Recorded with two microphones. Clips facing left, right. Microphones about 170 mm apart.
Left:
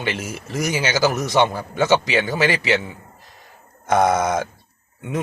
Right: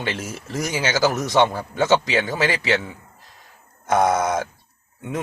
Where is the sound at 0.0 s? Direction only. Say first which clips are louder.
Left 2 dB; 10° left (ahead or behind).